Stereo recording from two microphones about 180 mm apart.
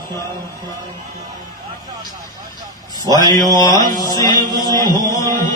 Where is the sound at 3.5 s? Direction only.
20° left (ahead or behind).